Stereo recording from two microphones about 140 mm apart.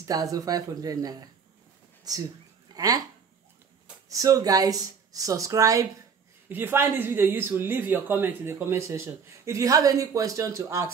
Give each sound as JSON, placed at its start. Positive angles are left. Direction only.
{"t": 0.0, "sound": "speech", "side_deg": -25}
{"t": 4.1, "sound": "speech", "side_deg": -25}